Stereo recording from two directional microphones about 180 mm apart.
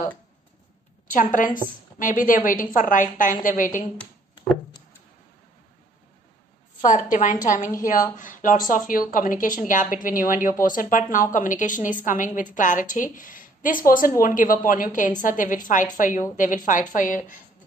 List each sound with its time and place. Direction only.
1.3 s a woman's voice: 50° left (ahead or behind)
6.8 s a woman's voice: 45° left (ahead or behind)